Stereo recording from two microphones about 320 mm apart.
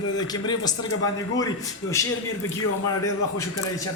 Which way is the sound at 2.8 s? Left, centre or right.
Centre.